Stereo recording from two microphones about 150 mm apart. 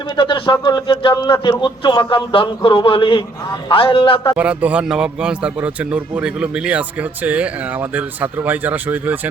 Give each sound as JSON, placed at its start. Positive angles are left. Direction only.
{"t": 0.2, "sound": "speech", "side_deg": 35}
{"t": 4.4, "sound": "a man's voice", "side_deg": -10}